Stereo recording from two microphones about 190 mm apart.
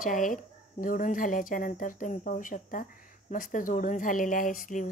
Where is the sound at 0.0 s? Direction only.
45° left (ahead or behind).